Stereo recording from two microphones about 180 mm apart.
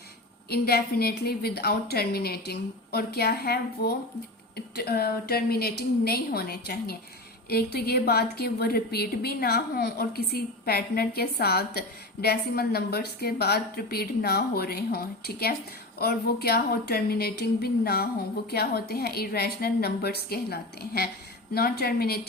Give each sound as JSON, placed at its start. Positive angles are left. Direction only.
{"t": 0.5, "sound": "a woman's voice", "side_deg": 60}